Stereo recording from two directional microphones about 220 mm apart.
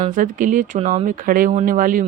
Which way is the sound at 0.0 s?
35° right (ahead or behind).